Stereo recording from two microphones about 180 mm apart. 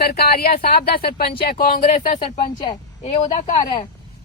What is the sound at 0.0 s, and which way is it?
Speech, 60° left (ahead or behind).